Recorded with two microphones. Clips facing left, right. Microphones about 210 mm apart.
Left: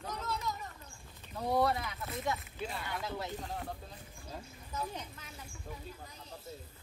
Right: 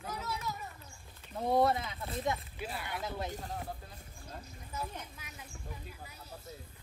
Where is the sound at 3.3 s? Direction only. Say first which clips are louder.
Even; 5° right (ahead or behind).